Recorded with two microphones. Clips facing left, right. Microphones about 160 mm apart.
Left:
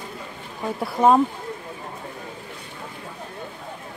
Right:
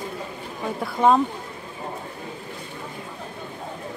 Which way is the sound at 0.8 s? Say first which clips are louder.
Left 2 dB; 5° left (ahead or behind).